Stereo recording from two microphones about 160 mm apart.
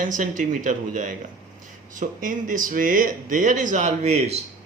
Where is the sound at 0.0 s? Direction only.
55° right (ahead or behind).